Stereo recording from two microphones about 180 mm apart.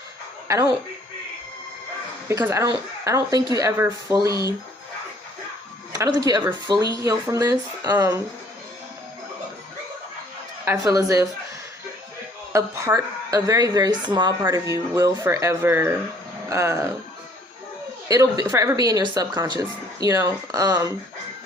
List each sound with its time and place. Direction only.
2.2 s speech: 15° right (ahead or behind)
5.9 s speech: 20° right (ahead or behind)
10.7 s speech: 20° right (ahead or behind)
12.5 s speech: 15° right (ahead or behind)
18.1 s speech: 20° right (ahead or behind)